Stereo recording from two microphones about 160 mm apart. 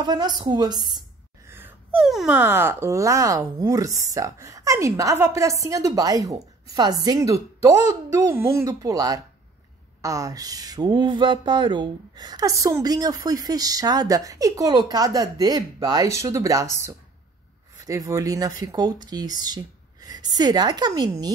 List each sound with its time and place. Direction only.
0.0 s speech: 25° right (ahead or behind)
1.5 s speech: 10° right (ahead or behind)
17.8 s a woman's voice: 20° right (ahead or behind)